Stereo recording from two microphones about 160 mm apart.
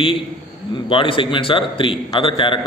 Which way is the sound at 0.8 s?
30° left (ahead or behind).